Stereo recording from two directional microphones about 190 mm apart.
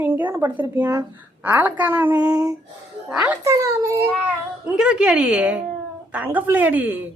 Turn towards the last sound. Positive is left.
turn(degrees=-10)  # may be behind; listen again after turning